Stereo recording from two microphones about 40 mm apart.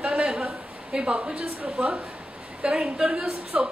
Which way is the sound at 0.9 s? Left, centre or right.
Right.